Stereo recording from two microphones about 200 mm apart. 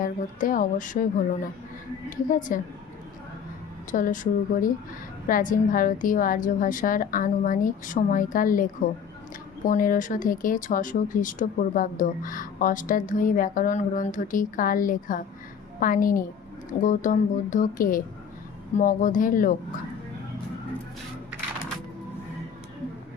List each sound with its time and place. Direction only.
0.0 s speech: 40° left (ahead or behind)
2.0 s a woman's voice: 40° left (ahead or behind)
3.9 s a woman's voice: 40° left (ahead or behind)